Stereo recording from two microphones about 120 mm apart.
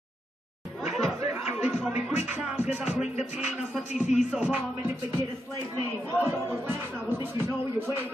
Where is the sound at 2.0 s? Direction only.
15° right (ahead or behind).